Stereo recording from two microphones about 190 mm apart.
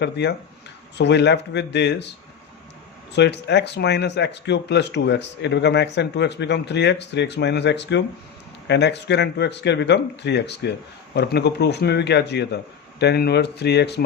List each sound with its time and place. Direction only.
0.0 s speech: 60° left (ahead or behind)